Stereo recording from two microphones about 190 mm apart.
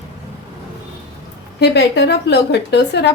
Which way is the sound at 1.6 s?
65° left (ahead or behind).